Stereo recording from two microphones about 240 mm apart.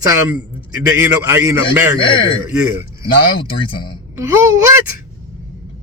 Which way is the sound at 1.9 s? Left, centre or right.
Left.